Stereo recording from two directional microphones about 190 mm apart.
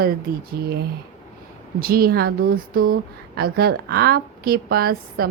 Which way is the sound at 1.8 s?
50° right (ahead or behind).